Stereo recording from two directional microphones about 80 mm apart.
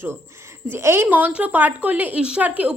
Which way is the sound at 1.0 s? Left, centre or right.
Centre.